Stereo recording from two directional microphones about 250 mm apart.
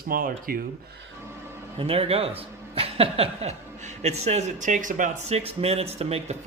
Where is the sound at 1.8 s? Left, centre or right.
Right.